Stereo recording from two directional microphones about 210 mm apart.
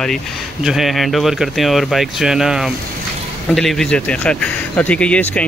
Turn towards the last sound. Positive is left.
turn(degrees=5)  # may be behind; listen again after turning